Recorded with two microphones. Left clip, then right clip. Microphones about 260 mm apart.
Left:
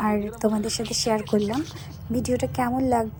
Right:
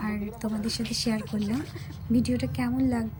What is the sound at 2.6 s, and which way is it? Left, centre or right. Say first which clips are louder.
Speech: left 4 dB; left.